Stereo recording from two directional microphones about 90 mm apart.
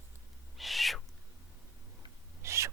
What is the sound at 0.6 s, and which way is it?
Owl, centre (ahead or behind).